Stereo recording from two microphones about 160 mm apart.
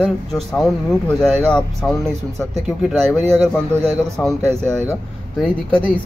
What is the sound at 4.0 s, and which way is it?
Speech, centre (ahead or behind).